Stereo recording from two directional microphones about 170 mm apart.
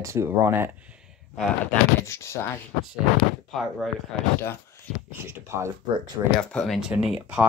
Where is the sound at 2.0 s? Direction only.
15° left (ahead or behind).